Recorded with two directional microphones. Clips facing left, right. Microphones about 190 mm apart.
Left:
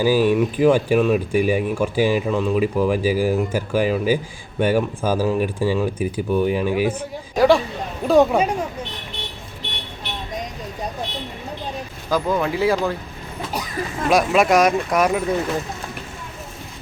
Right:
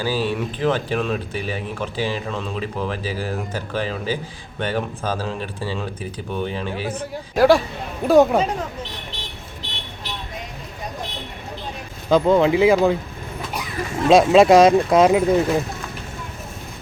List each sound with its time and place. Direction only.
0.0 s speech: 15° left (ahead or behind)
7.3 s speech: 5° right (ahead or behind)
8.4 s speech: 10° left (ahead or behind)
12.1 s speech: 25° right (ahead or behind)
14.1 s speech: 25° right (ahead or behind)